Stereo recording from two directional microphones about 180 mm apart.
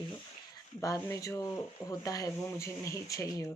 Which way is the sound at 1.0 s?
15° left (ahead or behind).